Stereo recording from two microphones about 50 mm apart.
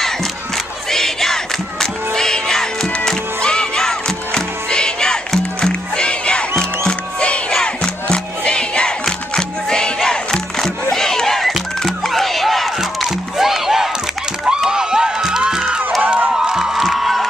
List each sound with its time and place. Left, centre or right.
0.8 s music: centre; by 7.5 s left
7.6 s crowd: left
9.3 s music: centre
10.0 s battle cry: centre
11.5 s music: centre
14.4 s a sound: centre
16.0 s crowd: right
16.4 s music: centre